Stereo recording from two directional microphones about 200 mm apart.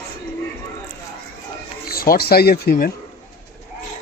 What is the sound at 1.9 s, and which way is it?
A man's voice, 50° left (ahead or behind).